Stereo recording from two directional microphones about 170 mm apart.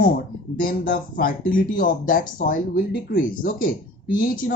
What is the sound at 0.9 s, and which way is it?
Speech, 60° left (ahead or behind).